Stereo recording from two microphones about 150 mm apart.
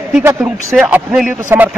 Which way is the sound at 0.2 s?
20° right (ahead or behind).